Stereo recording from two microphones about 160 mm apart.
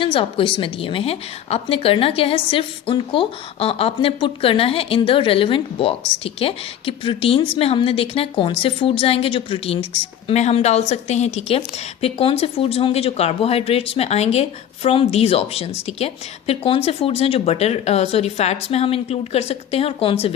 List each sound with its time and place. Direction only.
0.0 s a woman's voice: 35° left (ahead or behind)